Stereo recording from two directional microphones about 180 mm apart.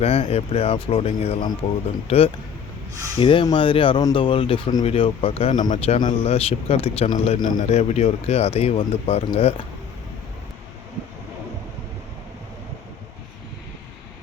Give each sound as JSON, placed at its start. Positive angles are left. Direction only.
{"t": 0.0, "sound": "speech", "side_deg": 35}